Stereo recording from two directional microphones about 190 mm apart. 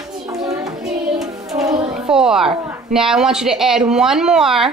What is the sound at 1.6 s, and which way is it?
Children playing, 20° right (ahead or behind).